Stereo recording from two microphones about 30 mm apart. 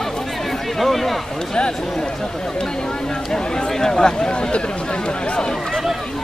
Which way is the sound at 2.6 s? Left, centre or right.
Left.